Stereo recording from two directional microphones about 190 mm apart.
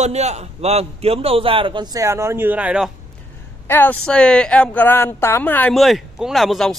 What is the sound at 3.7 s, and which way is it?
A woman's voice, 10° left (ahead or behind).